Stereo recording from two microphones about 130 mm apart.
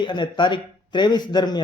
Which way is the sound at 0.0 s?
35° left (ahead or behind).